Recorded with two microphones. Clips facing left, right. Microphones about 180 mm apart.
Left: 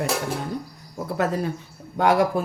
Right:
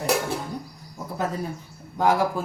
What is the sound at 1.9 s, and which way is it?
Speech, 70° left (ahead or behind).